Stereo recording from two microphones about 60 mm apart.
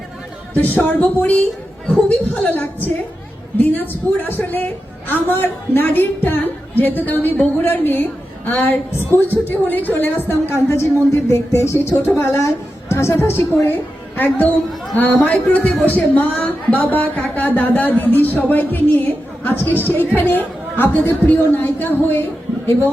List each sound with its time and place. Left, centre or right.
0.5 s speech: left
1.9 s a man's voice: centre
2.5 s a woman's voice: left
14.2 s a woman's voice: left